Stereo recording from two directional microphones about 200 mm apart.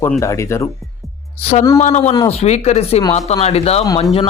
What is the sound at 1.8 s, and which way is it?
Speech, 35° left (ahead or behind).